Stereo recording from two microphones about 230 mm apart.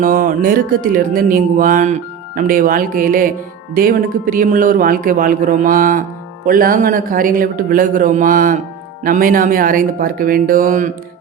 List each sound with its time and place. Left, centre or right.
0.0 s speech: right